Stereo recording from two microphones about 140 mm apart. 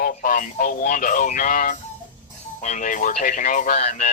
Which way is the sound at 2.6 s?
60° left (ahead or behind).